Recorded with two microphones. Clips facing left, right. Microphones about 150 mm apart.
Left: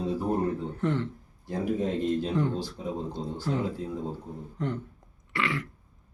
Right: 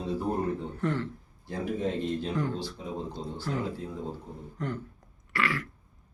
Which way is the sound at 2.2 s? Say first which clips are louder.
Left 3 dB; 25° left (ahead or behind).